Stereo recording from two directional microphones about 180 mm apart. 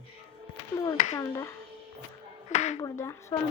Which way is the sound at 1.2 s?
15° left (ahead or behind).